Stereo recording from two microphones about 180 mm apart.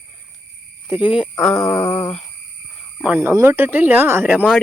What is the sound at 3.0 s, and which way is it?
Speech, 10° right (ahead or behind).